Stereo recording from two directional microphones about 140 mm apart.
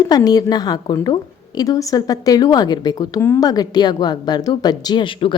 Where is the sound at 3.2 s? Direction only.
15° left (ahead or behind).